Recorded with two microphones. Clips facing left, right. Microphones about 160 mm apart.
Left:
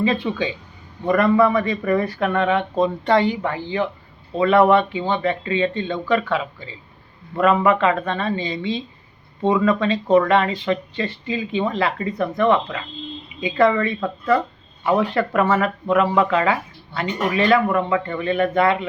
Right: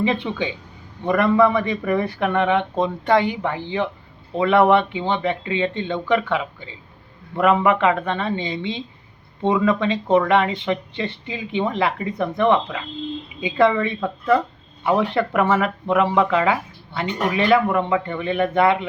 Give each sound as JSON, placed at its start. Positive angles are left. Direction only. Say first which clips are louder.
{"t": 0.0, "sound": "speech", "louder": "left 1 dB", "side_deg": -20}